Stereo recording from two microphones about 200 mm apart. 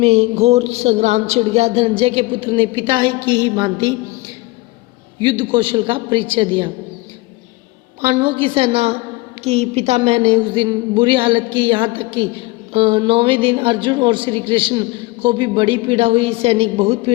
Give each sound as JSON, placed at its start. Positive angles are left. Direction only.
{"t": 0.0, "sound": "a man's voice", "side_deg": -30}
{"t": 5.2, "sound": "a man's voice", "side_deg": -25}
{"t": 8.0, "sound": "a man's voice", "side_deg": -25}